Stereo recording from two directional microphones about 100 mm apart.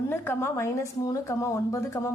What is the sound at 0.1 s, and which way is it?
A woman's voice, 25° left (ahead or behind).